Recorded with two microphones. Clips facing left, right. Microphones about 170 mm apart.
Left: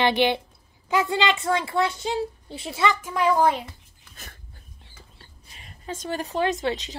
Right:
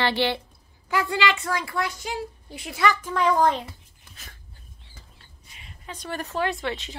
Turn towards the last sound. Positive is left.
turn(degrees=20)  # may be behind; listen again after turning